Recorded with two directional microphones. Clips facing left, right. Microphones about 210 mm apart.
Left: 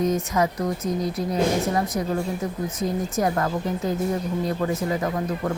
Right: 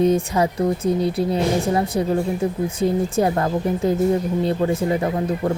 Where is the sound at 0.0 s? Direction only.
30° right (ahead or behind).